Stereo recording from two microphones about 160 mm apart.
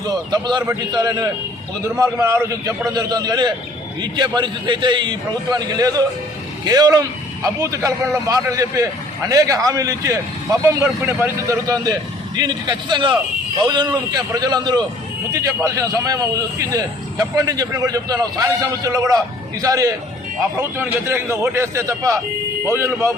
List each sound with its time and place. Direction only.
0.0 s a man's voice: 25° right (ahead or behind)